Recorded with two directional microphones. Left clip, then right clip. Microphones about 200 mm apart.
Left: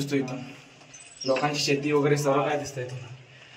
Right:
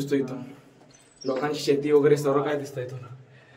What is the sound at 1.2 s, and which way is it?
A man's voice, 5° right (ahead or behind).